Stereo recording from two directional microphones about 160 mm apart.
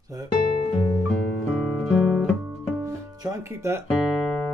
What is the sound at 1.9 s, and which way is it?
Guitar, centre (ahead or behind).